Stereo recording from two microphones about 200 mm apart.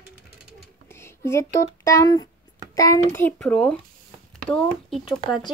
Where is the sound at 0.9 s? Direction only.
15° left (ahead or behind).